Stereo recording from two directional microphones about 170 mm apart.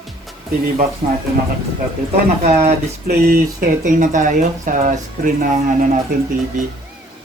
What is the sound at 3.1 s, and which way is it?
Speech, 60° right (ahead or behind).